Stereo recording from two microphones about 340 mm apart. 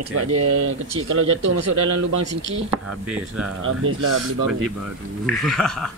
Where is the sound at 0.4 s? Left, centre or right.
Right.